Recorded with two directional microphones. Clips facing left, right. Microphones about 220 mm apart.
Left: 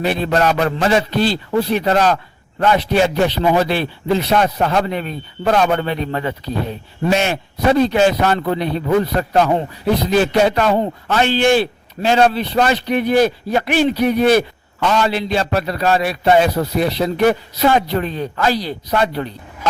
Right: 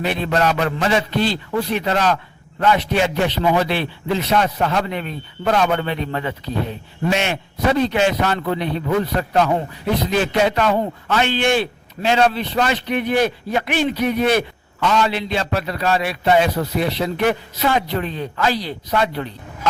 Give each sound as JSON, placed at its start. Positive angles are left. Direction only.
{"t": 0.0, "sound": "a man's voice", "side_deg": 35}